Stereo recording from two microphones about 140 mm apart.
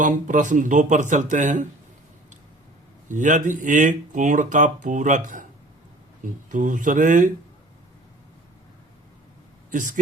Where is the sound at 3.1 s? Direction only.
65° right (ahead or behind).